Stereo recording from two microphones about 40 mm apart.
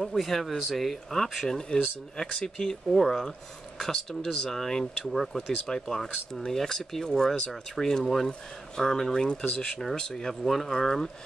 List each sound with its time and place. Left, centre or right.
0.0 s speech: centre
5.5 s speech: centre
10.4 s speech: centre